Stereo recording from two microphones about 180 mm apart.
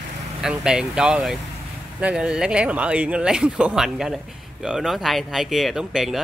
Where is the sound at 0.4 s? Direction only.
5° right (ahead or behind).